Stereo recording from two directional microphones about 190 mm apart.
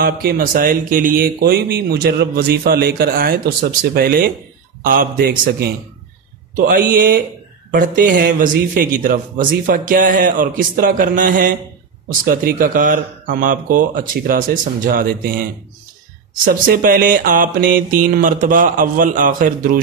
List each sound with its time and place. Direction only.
0.0 s speech: 55° right (ahead or behind)
16.4 s speech: 50° right (ahead or behind)